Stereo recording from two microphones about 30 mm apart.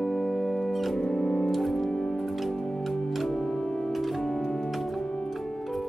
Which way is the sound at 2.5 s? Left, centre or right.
Centre.